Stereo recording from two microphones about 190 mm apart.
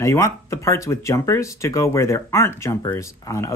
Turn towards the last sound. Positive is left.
turn(degrees=15)  # may be behind; listen again after turning